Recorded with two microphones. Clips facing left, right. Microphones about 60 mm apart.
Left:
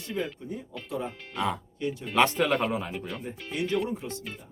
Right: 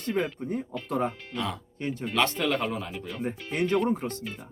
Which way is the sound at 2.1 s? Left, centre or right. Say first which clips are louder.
Left 4 dB; centre.